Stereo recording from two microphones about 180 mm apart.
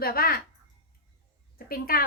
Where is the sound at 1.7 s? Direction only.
55° left (ahead or behind).